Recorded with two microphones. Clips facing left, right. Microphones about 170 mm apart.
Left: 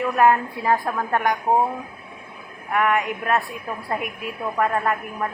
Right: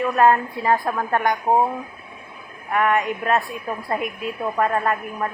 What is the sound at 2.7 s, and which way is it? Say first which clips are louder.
Speech: right 1 dB; 5° left (ahead or behind).